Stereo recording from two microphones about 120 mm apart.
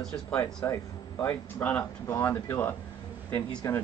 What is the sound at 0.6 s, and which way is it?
Speech, 25° left (ahead or behind).